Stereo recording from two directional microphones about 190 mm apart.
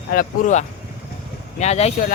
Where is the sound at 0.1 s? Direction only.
45° left (ahead or behind).